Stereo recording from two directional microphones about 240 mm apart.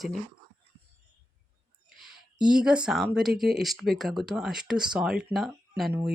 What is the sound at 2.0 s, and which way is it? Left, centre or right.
Speech, centre.